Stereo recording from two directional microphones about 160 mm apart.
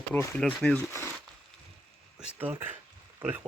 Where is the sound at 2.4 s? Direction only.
10° right (ahead or behind).